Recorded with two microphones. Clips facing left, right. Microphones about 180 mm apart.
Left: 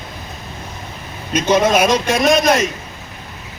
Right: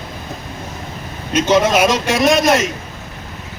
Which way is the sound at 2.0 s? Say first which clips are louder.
Right 1 dB; 20° left (ahead or behind).